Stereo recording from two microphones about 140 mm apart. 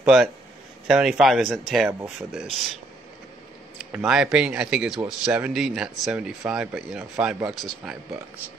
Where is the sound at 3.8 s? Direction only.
5° right (ahead or behind).